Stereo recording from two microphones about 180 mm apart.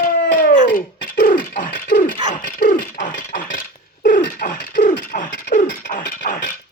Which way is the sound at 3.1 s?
50° left (ahead or behind).